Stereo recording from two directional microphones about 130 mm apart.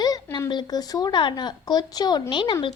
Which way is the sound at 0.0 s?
30° left (ahead or behind).